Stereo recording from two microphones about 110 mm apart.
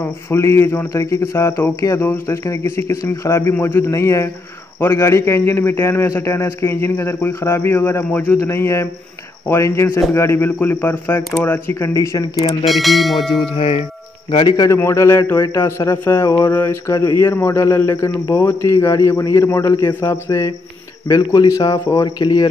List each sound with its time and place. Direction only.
0.3 s a man's voice: 25° left (ahead or behind)
12.6 s church bell: centre (ahead or behind)
14.6 s a man's voice: 25° left (ahead or behind)